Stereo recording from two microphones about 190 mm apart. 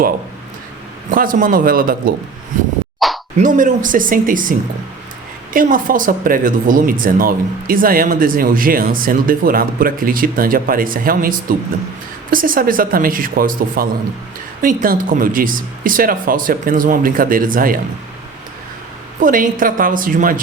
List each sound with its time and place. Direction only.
1.1 s speech: 45° right (ahead or behind)
3.0 s a sound: centre (ahead or behind)
3.3 s speech: 45° right (ahead or behind)
5.5 s speech: 45° right (ahead or behind)
19.2 s speech: 45° right (ahead or behind)